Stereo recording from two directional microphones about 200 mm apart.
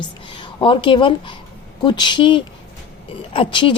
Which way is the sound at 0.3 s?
25° left (ahead or behind).